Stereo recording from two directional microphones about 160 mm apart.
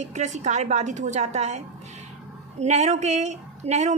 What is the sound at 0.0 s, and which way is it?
A woman's voice, 45° right (ahead or behind).